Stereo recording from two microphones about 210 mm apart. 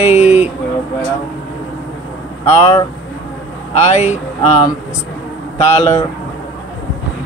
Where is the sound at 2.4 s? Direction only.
30° left (ahead or behind).